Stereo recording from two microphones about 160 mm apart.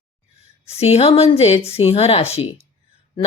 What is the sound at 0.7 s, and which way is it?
Speech, 40° left (ahead or behind).